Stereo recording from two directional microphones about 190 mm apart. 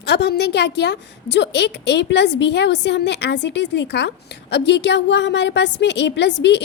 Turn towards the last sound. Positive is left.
turn(degrees=65)  # may be behind; listen again after turning